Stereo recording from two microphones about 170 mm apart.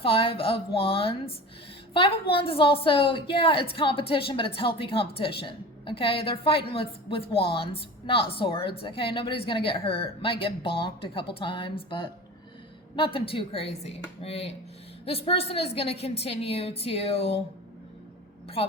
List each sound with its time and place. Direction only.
0.0 s a woman's voice: 30° left (ahead or behind)